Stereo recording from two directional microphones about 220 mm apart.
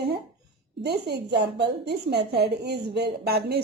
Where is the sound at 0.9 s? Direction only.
45° right (ahead or behind).